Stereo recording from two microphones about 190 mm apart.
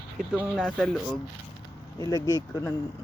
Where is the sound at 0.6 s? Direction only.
5° left (ahead or behind).